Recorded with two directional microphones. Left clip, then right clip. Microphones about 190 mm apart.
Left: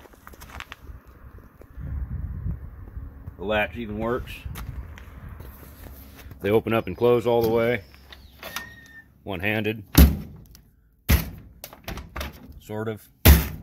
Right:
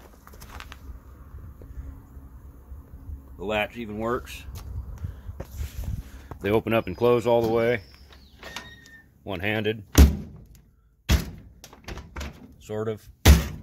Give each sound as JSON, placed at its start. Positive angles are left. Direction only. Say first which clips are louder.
{"t": 3.3, "sound": "speech", "louder": "left 2 dB", "side_deg": 20}
{"t": 6.4, "sound": "speech", "louder": "left 1 dB", "side_deg": 0}
{"t": 8.1, "sound": "mechanisms", "louder": "left 4 dB", "side_deg": 55}
{"t": 9.2, "sound": "speech", "louder": "left 1 dB", "side_deg": 0}
{"t": 11.6, "sound": "typewriter", "louder": "left 4 dB", "side_deg": 60}
{"t": 12.6, "sound": "a sound", "louder": "right 1 dB", "side_deg": 0}